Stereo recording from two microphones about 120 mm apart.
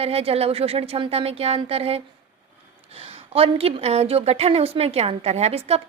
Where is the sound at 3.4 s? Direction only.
55° right (ahead or behind).